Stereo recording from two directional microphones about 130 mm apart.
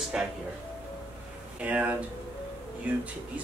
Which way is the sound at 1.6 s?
10° right (ahead or behind).